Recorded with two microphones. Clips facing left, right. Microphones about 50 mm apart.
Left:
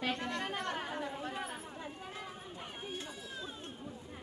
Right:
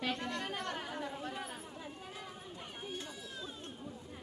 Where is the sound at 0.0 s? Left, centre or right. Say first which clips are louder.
Left 1 dB; centre.